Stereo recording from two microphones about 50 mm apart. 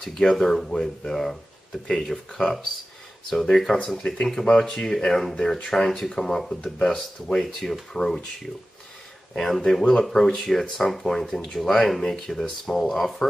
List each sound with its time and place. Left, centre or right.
0.0 s speech: centre
6.8 s speech: centre
7.3 s speech: centre
9.4 s speech: centre